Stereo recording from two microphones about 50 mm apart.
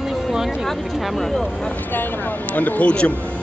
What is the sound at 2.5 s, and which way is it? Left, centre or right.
Speech, left.